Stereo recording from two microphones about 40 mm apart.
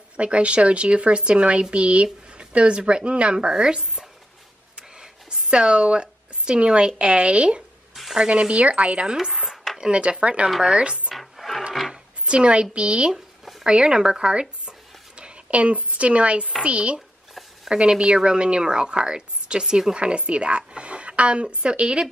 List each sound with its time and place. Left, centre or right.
0.2 s a woman's voice: right
7.9 s a sound: centre
8.3 s a woman's voice: right
9.0 s a woman's voice: centre
11.1 s roaring cats: centre
12.3 s a woman's voice: right